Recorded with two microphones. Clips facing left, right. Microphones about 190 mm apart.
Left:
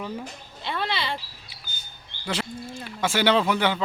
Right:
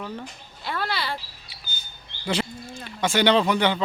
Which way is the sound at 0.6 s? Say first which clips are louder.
Even; 5° right (ahead or behind).